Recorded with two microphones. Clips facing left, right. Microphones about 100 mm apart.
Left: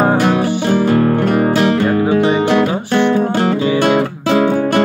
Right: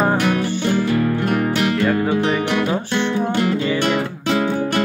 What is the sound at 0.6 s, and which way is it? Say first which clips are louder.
Music: left 5 dB; 55° left (ahead or behind).